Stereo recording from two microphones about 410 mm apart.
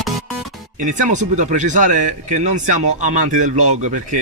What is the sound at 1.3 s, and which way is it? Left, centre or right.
Speech, centre.